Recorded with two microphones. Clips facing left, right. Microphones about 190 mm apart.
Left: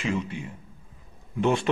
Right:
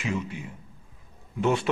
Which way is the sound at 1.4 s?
10° right (ahead or behind).